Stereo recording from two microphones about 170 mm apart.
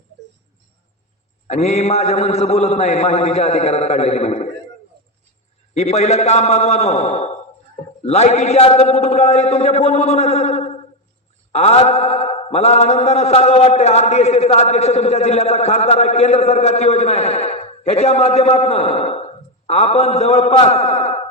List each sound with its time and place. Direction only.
1.5 s mantra: 40° left (ahead or behind)
5.7 s mantra: 40° left (ahead or behind)